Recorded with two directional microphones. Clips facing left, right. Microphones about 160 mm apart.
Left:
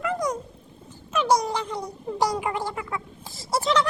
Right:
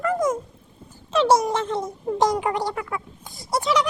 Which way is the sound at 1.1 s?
25° right (ahead or behind).